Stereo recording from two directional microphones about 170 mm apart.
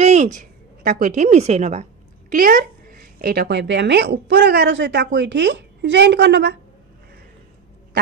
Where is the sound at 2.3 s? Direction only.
55° right (ahead or behind); by 6.6 s 85° right.